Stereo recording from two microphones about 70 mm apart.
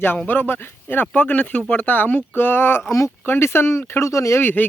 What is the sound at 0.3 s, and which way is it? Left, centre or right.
Speech, left.